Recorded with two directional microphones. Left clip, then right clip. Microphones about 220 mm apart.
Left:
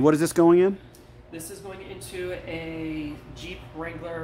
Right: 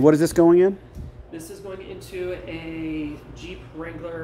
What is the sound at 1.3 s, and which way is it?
Speech, 15° left (ahead or behind).